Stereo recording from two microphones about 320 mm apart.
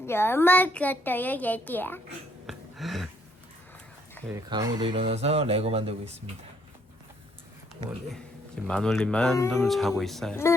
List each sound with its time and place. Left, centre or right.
0.0 s a child's voice: centre
2.5 s a sound: centre
4.3 s speech: centre
8.6 s a child's voice: centre